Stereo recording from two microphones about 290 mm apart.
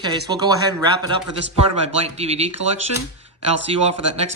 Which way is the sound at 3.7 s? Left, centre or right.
Centre.